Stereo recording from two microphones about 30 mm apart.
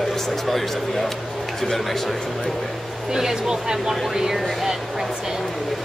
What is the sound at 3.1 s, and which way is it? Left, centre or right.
Speech, right.